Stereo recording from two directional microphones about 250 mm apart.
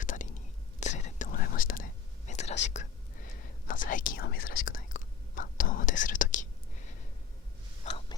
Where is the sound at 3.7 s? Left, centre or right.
Left.